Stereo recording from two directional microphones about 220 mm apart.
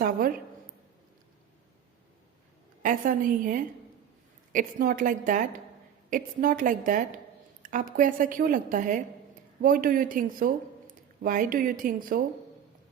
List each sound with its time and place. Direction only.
0.0 s a woman's voice: 40° right (ahead or behind)
2.8 s a woman's voice: 35° right (ahead or behind)